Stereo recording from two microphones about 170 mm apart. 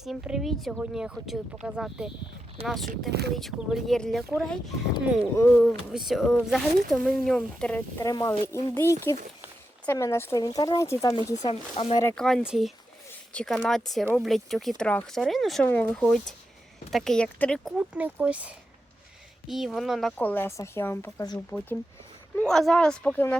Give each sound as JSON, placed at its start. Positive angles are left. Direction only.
{"t": 0.0, "sound": "speech", "side_deg": 0}
{"t": 3.1, "sound": "speech", "side_deg": -75}
{"t": 3.3, "sound": "speech", "side_deg": 0}
{"t": 5.4, "sound": "speech", "side_deg": 15}
{"t": 5.9, "sound": "speech", "side_deg": 0}
{"t": 11.4, "sound": "speech", "side_deg": 35}
{"t": 12.1, "sound": "speech", "side_deg": 0}
{"t": 20.1, "sound": "speech", "side_deg": 10}
{"t": 22.4, "sound": "speech", "side_deg": 5}